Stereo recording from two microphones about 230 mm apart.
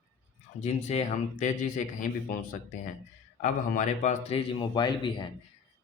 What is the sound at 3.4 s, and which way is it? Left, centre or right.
Speech, left.